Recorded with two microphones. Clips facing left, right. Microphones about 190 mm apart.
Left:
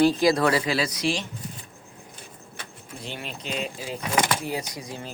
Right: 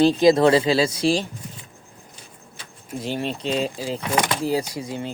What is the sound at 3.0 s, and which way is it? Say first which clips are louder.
Speech: right 10 dB; 35° right (ahead or behind).